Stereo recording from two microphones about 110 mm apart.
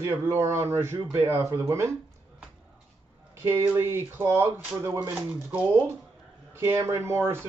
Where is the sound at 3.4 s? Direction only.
20° right (ahead or behind).